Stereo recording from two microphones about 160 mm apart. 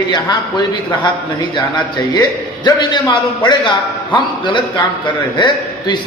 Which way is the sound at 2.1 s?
25° left (ahead or behind).